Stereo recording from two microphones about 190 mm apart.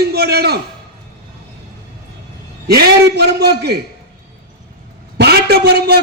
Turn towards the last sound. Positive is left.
turn(degrees=-55)  # may be behind; listen again after turning